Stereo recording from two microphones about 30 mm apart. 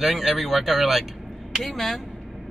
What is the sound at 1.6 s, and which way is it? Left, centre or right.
Speech, centre.